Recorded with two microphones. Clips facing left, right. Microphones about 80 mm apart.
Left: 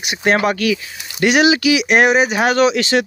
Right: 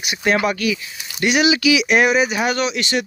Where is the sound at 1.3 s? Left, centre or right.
Left.